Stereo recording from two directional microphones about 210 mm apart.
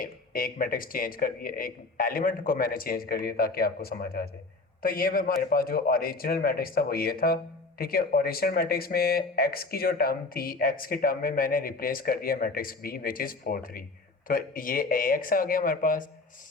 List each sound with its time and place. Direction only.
0.0 s speech: 45° left (ahead or behind)